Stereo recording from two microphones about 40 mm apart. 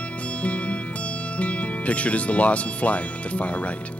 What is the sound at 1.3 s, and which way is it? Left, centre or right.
Speech, left.